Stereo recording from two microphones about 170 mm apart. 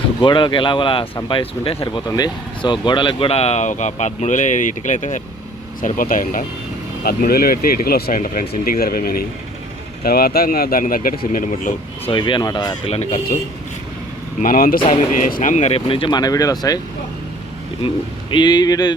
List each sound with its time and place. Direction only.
0.2 s speech: 25° left (ahead or behind); by 6.4 s 55° left (ahead or behind)
7.0 s speech: 65° left (ahead or behind)
12.0 s speech: 25° left (ahead or behind)
12.9 s speech: 40° left (ahead or behind)
14.4 s speech: 55° left (ahead or behind); by 16.8 s 20° left (ahead or behind)
17.8 s speech: 25° left (ahead or behind)